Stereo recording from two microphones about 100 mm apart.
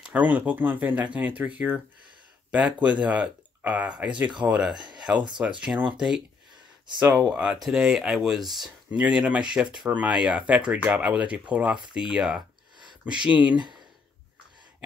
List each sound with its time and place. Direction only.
0.0 s speech: 15° right (ahead or behind)